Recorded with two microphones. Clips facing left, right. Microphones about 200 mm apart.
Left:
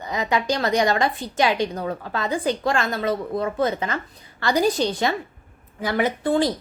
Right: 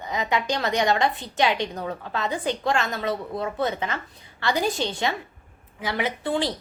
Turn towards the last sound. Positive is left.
turn(degrees=45)  # may be behind; listen again after turning